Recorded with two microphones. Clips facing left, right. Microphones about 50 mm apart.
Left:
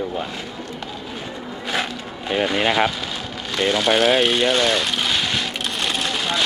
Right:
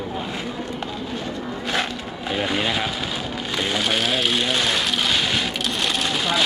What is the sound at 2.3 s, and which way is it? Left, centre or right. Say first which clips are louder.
Speech: left 3 dB; centre.